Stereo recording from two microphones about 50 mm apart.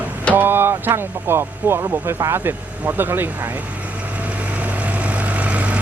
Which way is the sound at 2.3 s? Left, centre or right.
Right.